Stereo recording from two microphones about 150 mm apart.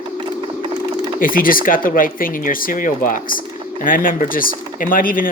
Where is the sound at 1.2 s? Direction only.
70° left (ahead or behind).